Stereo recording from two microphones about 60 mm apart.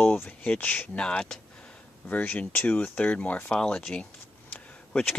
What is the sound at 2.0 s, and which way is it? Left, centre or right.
Speech, left.